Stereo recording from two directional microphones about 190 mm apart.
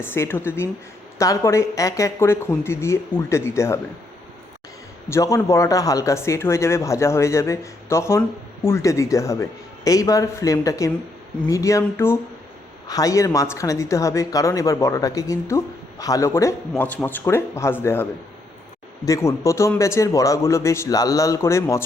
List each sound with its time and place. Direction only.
0.0 s a woman's voice: 10° left (ahead or behind)
5.0 s a woman's voice: 15° left (ahead or behind)